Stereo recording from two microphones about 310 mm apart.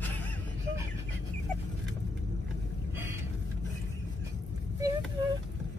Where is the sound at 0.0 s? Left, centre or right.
Centre.